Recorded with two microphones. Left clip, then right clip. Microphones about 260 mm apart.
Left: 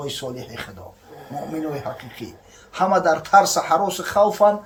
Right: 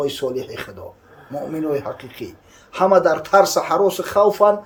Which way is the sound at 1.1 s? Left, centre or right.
Left.